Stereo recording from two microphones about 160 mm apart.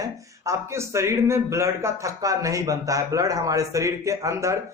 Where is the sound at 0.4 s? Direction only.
15° right (ahead or behind).